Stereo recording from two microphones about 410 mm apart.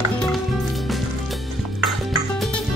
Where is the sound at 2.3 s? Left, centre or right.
Centre.